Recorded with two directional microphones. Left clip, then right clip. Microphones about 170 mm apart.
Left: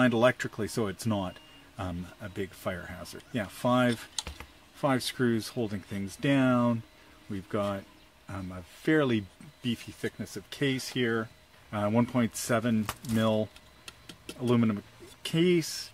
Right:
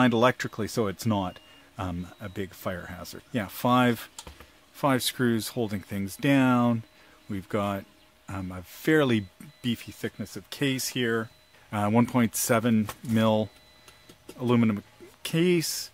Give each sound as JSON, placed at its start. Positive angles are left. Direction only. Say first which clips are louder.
{"t": 0.0, "sound": "speech", "louder": "right 2 dB", "side_deg": -50}